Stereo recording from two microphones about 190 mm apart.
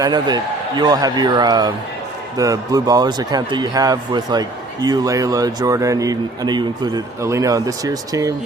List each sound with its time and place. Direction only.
0.0 s speech: 20° right (ahead or behind)